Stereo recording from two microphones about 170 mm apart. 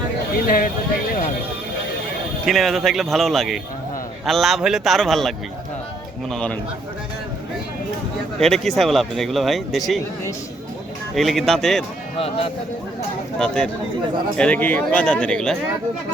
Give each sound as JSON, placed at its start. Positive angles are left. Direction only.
{"t": 0.4, "sound": "speech", "side_deg": 55}
{"t": 2.5, "sound": "speech", "side_deg": 0}
{"t": 6.3, "sound": "speech", "side_deg": 5}
{"t": 8.4, "sound": "speech", "side_deg": 0}
{"t": 11.1, "sound": "speech", "side_deg": 0}
{"t": 13.4, "sound": "a man's voice", "side_deg": 5}